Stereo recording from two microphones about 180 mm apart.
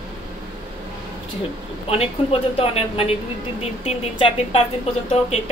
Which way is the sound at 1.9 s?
35° left (ahead or behind).